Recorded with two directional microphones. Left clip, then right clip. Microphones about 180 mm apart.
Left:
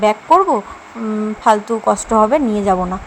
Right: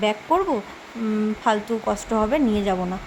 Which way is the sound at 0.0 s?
10° left (ahead or behind).